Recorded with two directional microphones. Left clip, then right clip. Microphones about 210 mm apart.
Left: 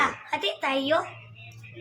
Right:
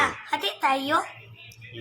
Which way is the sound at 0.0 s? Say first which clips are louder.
Right 1 dB; 20° right (ahead or behind).